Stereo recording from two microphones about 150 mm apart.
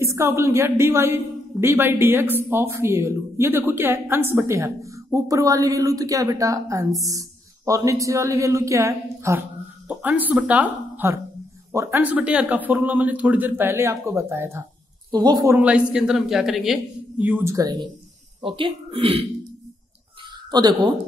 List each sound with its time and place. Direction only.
0.0 s a woman's voice: 20° right (ahead or behind)
15.0 s speech: 30° right (ahead or behind)
15.4 s speech: 10° right (ahead or behind)
18.4 s speech: 35° right (ahead or behind)
20.5 s a woman's voice: 25° right (ahead or behind)